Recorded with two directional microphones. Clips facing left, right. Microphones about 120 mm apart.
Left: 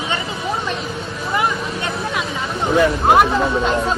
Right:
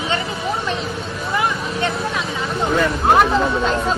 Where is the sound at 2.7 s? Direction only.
10° left (ahead or behind).